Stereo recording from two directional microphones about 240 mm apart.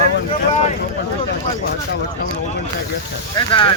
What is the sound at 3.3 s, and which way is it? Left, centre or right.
Speech, centre.